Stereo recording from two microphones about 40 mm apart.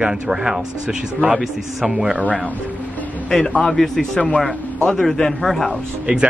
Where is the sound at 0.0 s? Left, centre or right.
Centre.